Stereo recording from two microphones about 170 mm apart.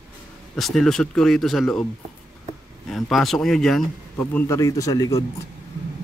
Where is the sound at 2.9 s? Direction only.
Centre (ahead or behind).